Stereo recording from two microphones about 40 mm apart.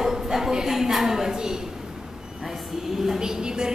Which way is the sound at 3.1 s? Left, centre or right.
Centre.